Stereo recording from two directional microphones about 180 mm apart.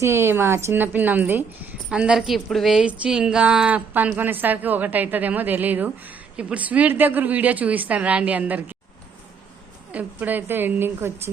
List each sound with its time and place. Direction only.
0.0 s a woman's voice: 15° right (ahead or behind)
9.9 s a woman's voice: 10° right (ahead or behind)